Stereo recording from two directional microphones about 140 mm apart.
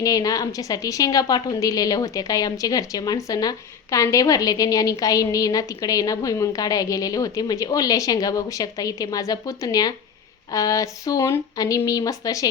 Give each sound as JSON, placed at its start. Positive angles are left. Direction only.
{"t": 0.0, "sound": "a woman's voice", "side_deg": 25}